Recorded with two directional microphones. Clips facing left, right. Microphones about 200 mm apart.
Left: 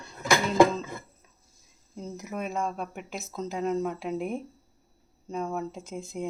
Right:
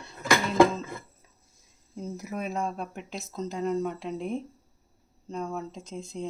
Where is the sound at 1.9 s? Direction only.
Centre (ahead or behind).